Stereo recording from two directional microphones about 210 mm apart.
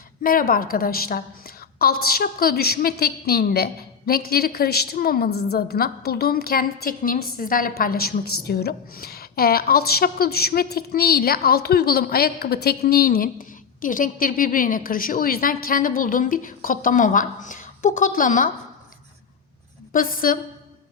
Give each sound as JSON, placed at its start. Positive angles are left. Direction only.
{"t": 0.2, "sound": "a woman's voice", "side_deg": 45}
{"t": 19.9, "sound": "a woman's voice", "side_deg": 40}